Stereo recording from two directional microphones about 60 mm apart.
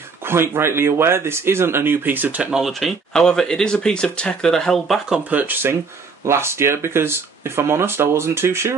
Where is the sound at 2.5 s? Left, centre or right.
Centre.